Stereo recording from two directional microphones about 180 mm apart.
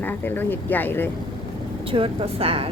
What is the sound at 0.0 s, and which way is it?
A woman's voice, 10° left (ahead or behind).